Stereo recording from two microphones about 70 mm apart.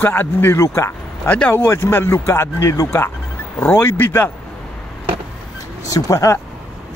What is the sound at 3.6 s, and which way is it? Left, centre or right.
Speech, left.